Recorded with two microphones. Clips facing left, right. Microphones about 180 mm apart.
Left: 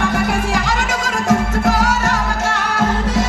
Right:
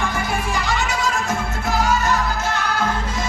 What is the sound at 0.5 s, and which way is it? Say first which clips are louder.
Music: left 3 dB; 90° left.